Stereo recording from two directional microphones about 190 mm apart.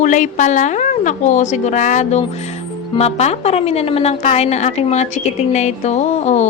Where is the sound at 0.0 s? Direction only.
40° left (ahead or behind).